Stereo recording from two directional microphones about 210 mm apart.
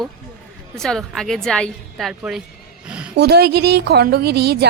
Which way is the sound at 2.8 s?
5° right (ahead or behind).